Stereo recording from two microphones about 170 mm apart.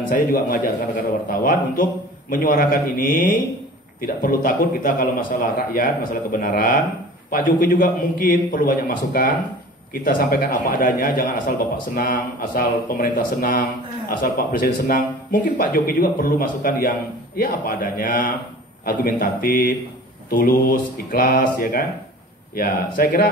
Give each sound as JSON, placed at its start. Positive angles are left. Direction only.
{"t": 0.1, "sound": "a man's voice", "side_deg": 55}